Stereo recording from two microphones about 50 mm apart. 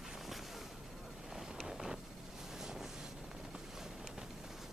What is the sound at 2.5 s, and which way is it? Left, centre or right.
Vehicle, centre.